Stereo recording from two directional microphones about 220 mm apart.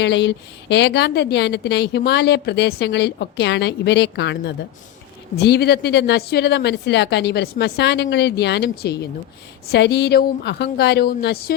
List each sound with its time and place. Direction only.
0.0 s a woman's voice: 55° left (ahead or behind)